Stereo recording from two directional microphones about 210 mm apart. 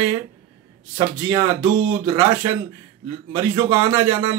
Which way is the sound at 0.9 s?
15° right (ahead or behind).